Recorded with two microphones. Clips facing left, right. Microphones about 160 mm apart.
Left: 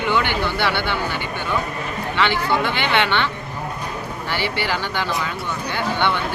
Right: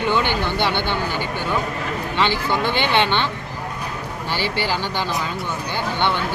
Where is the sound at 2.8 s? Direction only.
20° right (ahead or behind).